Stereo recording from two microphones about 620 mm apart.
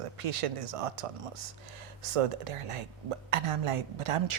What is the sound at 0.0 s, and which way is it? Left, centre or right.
A woman's voice, right.